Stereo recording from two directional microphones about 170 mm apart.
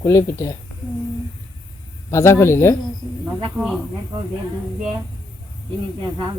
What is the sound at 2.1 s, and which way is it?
Speech, 15° left (ahead or behind).